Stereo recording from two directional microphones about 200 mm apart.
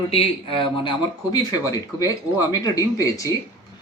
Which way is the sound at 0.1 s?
30° left (ahead or behind).